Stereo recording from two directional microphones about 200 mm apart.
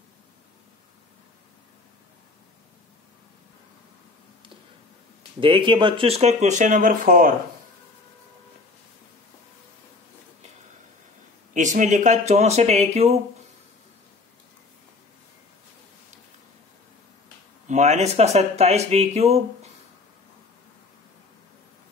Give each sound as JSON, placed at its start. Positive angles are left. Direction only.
{"t": 5.4, "sound": "speech", "side_deg": -25}
{"t": 11.5, "sound": "speech", "side_deg": -40}
{"t": 17.6, "sound": "speech", "side_deg": -35}